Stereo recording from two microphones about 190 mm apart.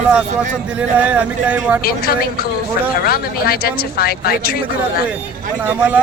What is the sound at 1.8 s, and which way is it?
Speech, 55° left (ahead or behind).